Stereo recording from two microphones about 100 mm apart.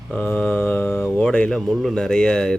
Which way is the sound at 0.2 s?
20° left (ahead or behind).